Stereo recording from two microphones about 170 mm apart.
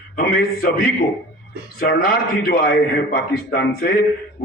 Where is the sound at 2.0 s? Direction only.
55° left (ahead or behind).